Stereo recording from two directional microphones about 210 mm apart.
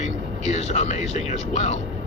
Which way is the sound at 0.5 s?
30° left (ahead or behind).